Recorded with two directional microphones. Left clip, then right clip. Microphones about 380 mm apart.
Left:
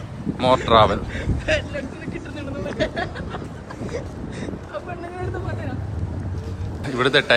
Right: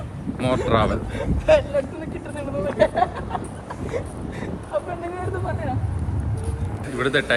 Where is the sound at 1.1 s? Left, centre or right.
Centre.